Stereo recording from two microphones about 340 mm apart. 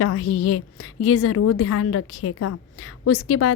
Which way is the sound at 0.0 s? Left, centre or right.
Left.